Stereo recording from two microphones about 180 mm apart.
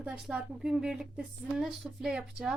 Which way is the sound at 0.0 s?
5° right (ahead or behind).